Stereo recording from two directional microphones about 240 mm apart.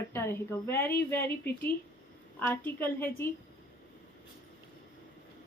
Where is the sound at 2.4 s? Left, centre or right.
Centre.